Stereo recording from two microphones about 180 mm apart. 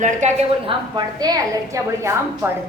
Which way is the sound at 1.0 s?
20° right (ahead or behind).